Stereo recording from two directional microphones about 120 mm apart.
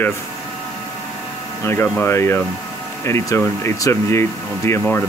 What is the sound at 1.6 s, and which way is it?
Speech, 20° left (ahead or behind).